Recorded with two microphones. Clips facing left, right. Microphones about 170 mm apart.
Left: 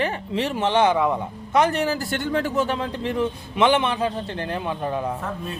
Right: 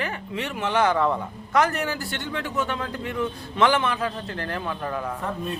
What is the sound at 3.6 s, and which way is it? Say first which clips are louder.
Speech: left 2 dB; 20° left (ahead or behind).